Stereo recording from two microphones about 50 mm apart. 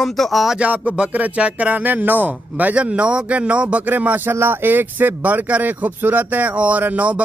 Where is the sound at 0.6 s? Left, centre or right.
Right.